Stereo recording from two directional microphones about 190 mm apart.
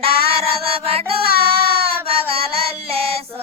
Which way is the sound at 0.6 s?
30° right (ahead or behind).